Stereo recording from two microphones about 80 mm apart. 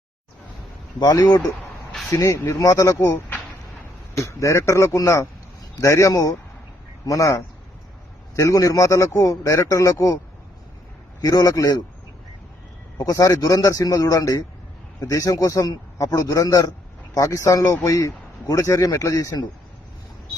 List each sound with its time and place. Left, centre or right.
0.9 s speech: left
2.0 s speech: left
11.2 s speech: left
13.0 s speech: left